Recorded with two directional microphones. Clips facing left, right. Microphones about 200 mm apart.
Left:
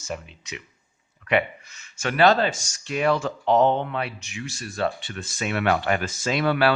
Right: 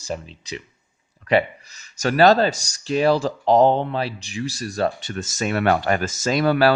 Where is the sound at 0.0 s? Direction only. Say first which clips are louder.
Right 4 dB; 35° right (ahead or behind).